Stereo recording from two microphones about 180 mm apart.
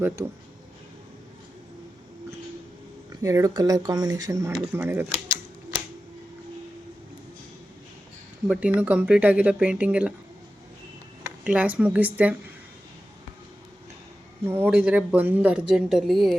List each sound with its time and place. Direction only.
3.1 s speech: 20° right (ahead or behind)
8.4 s speech: 5° right (ahead or behind)
11.2 s speech: 10° right (ahead or behind)
14.4 s speech: 10° right (ahead or behind)